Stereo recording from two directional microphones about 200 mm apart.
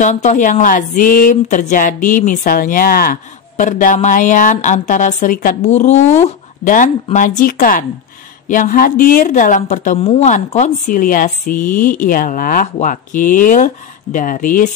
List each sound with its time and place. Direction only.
0.0 s speech: 35° left (ahead or behind)